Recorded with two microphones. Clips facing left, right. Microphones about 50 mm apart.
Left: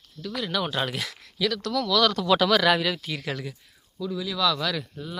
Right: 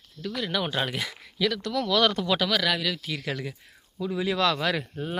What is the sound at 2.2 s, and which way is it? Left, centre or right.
Speech, centre.